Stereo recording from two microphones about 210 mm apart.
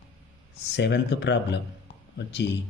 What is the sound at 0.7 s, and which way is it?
Speech, 55° left (ahead or behind).